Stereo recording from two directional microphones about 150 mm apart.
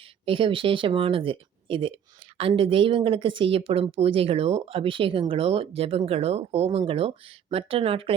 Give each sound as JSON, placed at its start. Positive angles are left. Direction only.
{"t": 0.3, "sound": "speech", "side_deg": -35}